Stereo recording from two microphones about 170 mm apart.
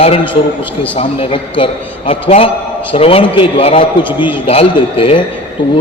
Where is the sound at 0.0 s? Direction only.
30° left (ahead or behind).